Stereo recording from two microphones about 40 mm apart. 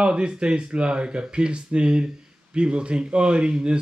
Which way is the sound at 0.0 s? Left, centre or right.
Right.